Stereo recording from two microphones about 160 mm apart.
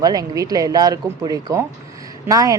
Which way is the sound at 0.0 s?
25° right (ahead or behind).